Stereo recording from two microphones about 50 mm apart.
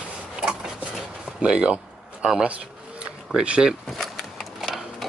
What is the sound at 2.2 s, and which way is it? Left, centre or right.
Speech, centre.